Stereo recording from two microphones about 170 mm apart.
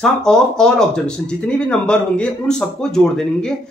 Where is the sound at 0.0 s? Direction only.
5° left (ahead or behind).